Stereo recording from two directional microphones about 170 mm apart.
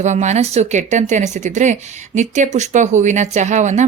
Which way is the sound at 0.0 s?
45° right (ahead or behind).